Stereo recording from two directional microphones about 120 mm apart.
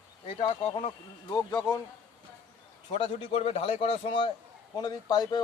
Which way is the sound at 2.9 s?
50° left (ahead or behind).